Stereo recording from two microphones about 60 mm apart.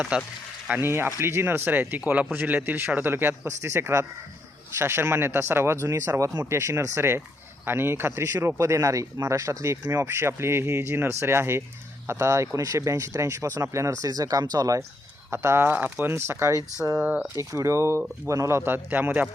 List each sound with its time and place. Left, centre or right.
0.8 s a man's voice: right
3.4 s speech: right
10.0 s speech: right
12.5 s speech: right
15.3 s speech: right
17.0 s speech: right
17.3 s a man's voice: right